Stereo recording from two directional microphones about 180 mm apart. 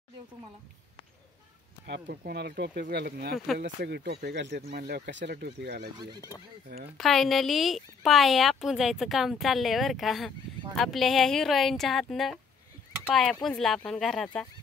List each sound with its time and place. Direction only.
1.9 s speech: 65° right (ahead or behind)
7.0 s speech: centre (ahead or behind)